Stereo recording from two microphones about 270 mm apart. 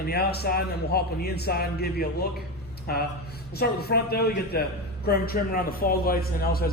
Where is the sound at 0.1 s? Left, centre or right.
Left.